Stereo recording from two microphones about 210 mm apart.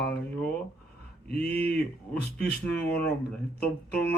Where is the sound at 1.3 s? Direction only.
5° left (ahead or behind).